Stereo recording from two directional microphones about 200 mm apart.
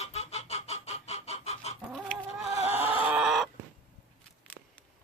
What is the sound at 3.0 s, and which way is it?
Chicken, 5° right (ahead or behind).